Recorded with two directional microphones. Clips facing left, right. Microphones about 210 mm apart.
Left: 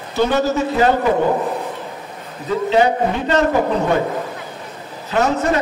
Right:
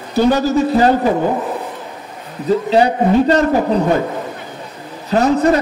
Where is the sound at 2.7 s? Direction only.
35° right (ahead or behind).